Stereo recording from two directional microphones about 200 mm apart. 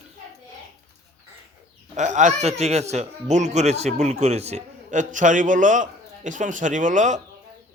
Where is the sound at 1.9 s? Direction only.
35° right (ahead or behind).